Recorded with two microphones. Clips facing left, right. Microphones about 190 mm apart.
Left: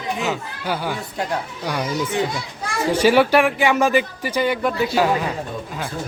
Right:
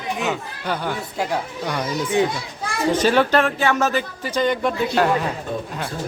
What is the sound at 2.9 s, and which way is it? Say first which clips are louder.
Speech: left 3 dB; 10° left (ahead or behind).